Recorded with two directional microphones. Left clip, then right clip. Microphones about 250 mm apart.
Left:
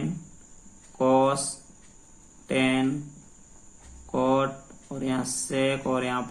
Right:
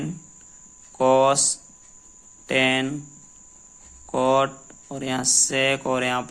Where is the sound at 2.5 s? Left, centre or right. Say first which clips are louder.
Right 5 dB; right.